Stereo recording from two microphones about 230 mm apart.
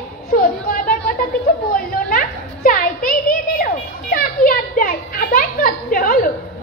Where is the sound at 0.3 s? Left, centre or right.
Left.